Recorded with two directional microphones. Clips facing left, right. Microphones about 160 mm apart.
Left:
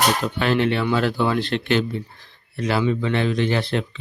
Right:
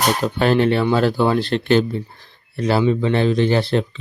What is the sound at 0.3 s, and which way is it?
Speech, 40° right (ahead or behind).